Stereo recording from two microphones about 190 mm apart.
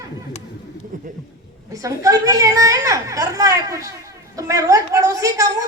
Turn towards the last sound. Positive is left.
turn(degrees=-15)  # may be behind; listen again after turning